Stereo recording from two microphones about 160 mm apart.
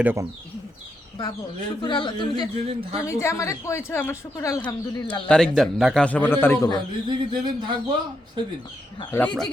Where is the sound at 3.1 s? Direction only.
15° left (ahead or behind).